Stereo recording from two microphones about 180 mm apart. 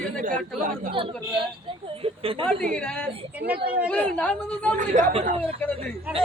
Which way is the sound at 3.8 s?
10° left (ahead or behind).